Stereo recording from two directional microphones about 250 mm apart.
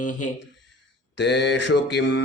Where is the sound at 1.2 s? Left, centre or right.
Left.